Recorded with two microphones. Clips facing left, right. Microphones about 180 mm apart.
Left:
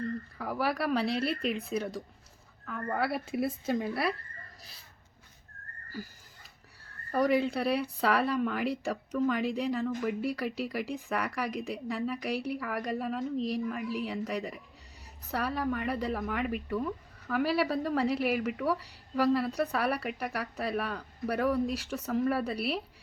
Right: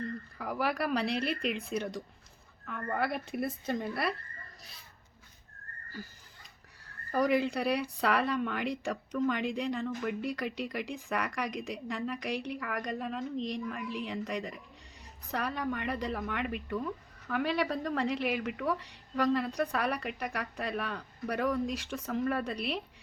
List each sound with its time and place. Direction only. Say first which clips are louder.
0.3 s speech: even; centre (ahead or behind)
7.1 s speech: left 1 dB; centre (ahead or behind)